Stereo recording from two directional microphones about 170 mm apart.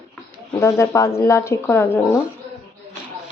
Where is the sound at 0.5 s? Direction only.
15° left (ahead or behind).